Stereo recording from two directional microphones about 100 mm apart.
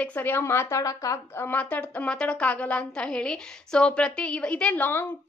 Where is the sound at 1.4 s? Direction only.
15° left (ahead or behind).